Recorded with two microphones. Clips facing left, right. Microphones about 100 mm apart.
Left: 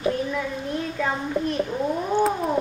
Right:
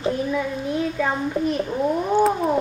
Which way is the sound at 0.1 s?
5° right (ahead or behind).